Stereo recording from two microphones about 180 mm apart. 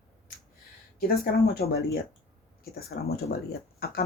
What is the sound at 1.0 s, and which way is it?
Speech, 55° left (ahead or behind).